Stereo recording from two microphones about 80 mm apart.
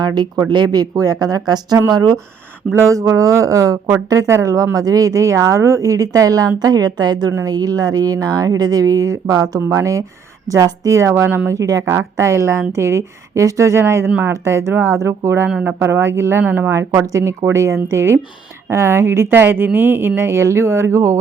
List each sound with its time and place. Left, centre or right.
0.0 s a woman's voice: right
2.7 s a woman's voice: right
11.1 s speech: right
11.5 s speech: right
11.9 s speech: right
14.4 s speech: right
15.4 s speech: centre
15.8 s speech: right